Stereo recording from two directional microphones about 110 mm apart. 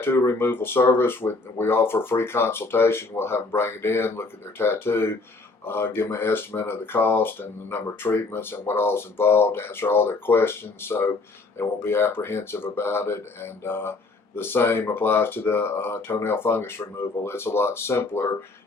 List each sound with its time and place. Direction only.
0.0 s speech: 20° left (ahead or behind)